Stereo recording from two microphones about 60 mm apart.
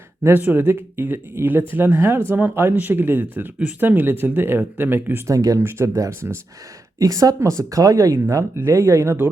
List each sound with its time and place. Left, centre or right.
0.3 s speech: right
5.2 s speech: right
5.5 s speech: right
7.0 s speech: right
7.3 s speech: right